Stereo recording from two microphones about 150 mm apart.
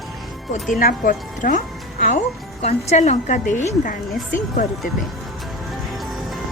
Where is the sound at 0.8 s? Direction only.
65° left (ahead or behind).